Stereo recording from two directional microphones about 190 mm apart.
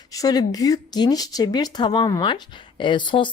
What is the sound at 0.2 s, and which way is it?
Speech, 20° left (ahead or behind).